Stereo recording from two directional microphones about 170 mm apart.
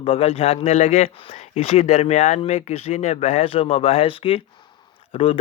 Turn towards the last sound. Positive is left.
turn(degrees=35)  # may be behind; listen again after turning